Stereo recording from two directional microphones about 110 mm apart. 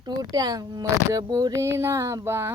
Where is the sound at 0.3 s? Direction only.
35° right (ahead or behind).